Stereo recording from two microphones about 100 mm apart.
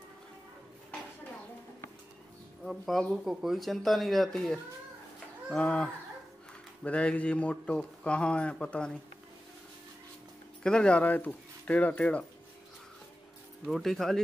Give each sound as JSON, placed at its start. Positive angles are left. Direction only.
{"t": 2.6, "sound": "speech", "side_deg": 0}
{"t": 10.6, "sound": "speech", "side_deg": 10}
{"t": 13.7, "sound": "speech", "side_deg": 0}